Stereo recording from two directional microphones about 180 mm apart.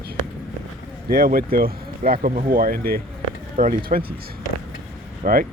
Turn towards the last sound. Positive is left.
turn(degrees=-50)  # may be behind; listen again after turning